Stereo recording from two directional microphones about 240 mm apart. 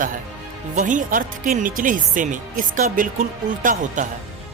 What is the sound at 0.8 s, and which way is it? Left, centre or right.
Speech, right.